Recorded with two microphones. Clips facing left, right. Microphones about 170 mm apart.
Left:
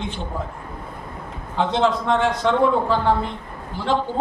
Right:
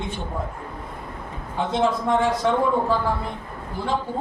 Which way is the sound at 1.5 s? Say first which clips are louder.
Left 2 dB; 75° left (ahead or behind).